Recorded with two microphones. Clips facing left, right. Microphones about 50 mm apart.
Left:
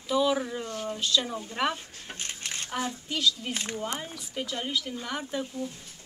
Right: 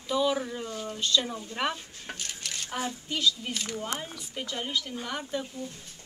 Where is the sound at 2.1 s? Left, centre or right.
Left.